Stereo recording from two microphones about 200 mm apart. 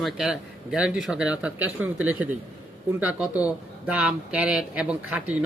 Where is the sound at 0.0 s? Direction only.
Centre (ahead or behind).